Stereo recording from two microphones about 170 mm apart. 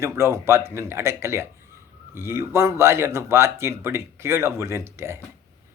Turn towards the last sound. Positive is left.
turn(degrees=-15)  # may be behind; listen again after turning